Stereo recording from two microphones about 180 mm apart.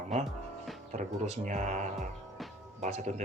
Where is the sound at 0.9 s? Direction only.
40° right (ahead or behind).